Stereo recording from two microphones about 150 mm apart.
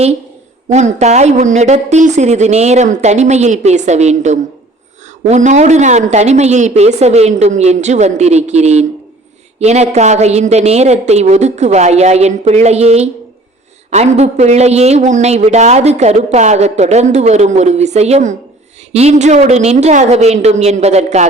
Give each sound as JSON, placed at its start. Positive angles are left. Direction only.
{"t": 0.7, "sound": "speech", "side_deg": -50}